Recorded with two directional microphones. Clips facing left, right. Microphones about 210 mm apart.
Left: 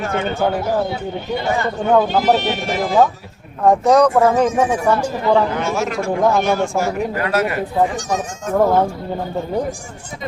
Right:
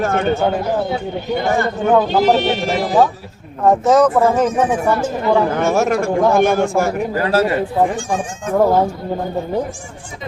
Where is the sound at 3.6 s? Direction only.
Centre (ahead or behind).